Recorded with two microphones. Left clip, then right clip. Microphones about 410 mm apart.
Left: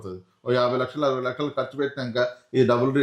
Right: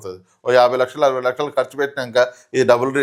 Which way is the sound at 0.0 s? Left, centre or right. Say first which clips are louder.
Right 8 dB; right.